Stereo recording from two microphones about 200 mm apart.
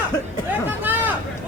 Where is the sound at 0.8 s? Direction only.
10° right (ahead or behind).